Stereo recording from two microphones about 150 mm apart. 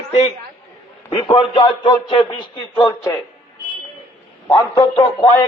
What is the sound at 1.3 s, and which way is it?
A man's voice, 35° left (ahead or behind).